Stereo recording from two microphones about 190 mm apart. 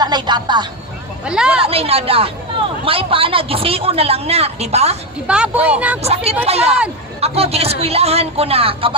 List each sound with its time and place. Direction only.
0.0 s a woman's voice: 20° right (ahead or behind)
1.2 s a woman's voice: 5° right (ahead or behind)
1.6 s a man's voice: 30° right (ahead or behind)
5.3 s a woman's voice: 5° right (ahead or behind)
6.0 s a man's voice: 30° right (ahead or behind)